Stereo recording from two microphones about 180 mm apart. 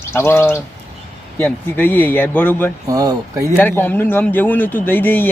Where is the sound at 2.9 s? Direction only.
20° right (ahead or behind).